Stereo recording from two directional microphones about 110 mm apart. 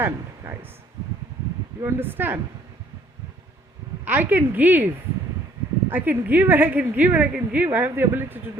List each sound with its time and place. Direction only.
0.4 s a woman's voice: 20° right (ahead or behind)
1.8 s speech: 20° right (ahead or behind)
4.0 s a woman's voice: 20° right (ahead or behind)
5.9 s a woman's voice: 15° right (ahead or behind)